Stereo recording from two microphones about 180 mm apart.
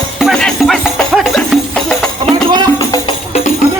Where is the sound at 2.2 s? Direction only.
30° right (ahead or behind).